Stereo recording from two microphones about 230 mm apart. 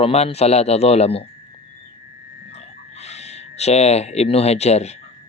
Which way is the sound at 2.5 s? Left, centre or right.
Left.